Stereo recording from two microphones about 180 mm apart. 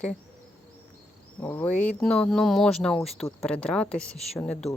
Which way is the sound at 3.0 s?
15° left (ahead or behind).